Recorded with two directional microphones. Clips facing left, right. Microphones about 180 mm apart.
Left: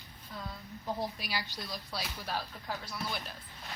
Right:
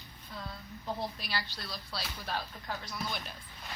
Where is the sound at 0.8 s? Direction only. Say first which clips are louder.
Left 1 dB; 10° left (ahead or behind).